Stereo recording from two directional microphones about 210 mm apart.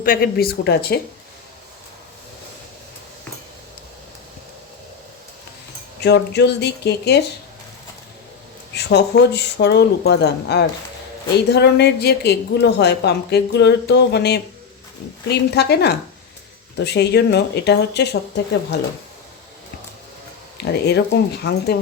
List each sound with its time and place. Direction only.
0.0 s a woman's voice: 45° left (ahead or behind)
6.0 s a woman's voice: 55° left (ahead or behind)
8.7 s a woman's voice: 55° left (ahead or behind)
20.8 s a woman's voice: 50° left (ahead or behind)